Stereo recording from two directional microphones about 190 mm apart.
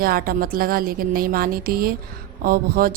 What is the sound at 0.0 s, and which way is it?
A woman's voice, 50° right (ahead or behind).